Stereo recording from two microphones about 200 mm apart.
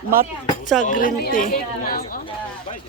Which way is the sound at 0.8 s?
40° left (ahead or behind).